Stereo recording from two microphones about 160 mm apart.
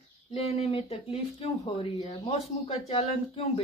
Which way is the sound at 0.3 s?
40° left (ahead or behind).